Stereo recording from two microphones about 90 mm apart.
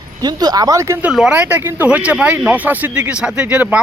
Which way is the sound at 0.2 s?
45° right (ahead or behind).